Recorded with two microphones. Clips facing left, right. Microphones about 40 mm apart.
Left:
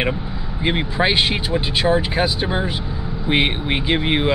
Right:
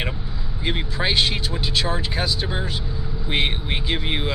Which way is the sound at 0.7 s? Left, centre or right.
Left.